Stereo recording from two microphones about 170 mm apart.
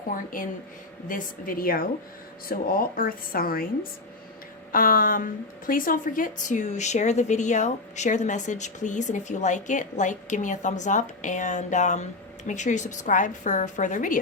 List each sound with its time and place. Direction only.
0.1 s a woman's voice: 55° left (ahead or behind)
4.7 s a woman's voice: 55° left (ahead or behind)